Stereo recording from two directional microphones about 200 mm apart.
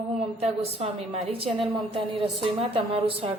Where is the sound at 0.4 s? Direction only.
30° right (ahead or behind).